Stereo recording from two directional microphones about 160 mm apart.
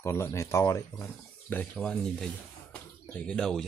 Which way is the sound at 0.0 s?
20° left (ahead or behind).